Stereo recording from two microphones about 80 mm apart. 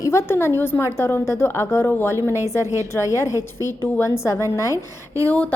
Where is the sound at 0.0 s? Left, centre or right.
Left.